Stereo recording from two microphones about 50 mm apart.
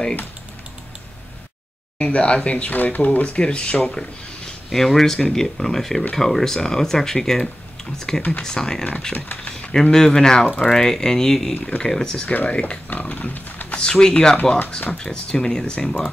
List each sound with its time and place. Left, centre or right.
2.0 s speech: centre
4.5 s speech: centre
9.1 s speech: left
9.6 s speech: centre
12.3 s speech: left
13.1 s pig: left
13.7 s speech: centre
15.0 s speech: centre